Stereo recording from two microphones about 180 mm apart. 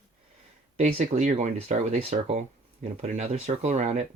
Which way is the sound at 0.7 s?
40° right (ahead or behind).